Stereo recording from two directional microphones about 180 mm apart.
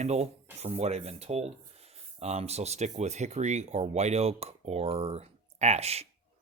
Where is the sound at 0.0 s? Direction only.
35° right (ahead or behind).